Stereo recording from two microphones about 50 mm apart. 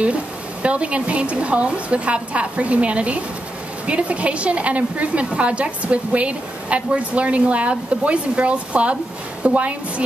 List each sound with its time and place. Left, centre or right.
0.0 s a woman's voice: right